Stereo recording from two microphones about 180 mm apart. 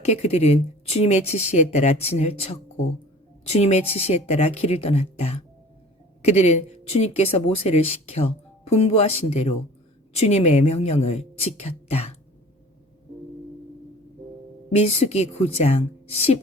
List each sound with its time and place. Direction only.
0.0 s speech: 40° left (ahead or behind)
14.7 s speech: 35° left (ahead or behind)